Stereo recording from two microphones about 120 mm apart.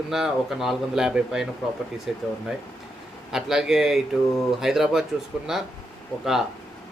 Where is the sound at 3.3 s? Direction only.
5° right (ahead or behind).